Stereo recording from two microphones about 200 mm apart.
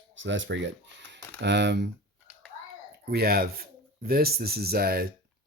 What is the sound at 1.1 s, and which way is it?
Speech, 60° right (ahead or behind).